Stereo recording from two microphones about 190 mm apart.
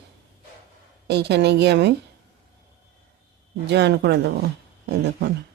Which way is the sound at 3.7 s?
65° right (ahead or behind).